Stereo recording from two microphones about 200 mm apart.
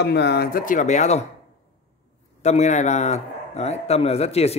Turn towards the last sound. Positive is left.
turn(degrees=30)  # may be behind; listen again after turning